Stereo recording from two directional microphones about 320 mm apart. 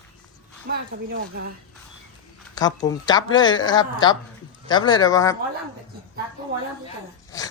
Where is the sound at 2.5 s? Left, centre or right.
Centre.